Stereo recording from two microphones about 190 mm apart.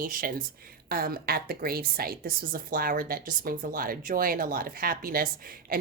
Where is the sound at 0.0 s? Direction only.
50° right (ahead or behind).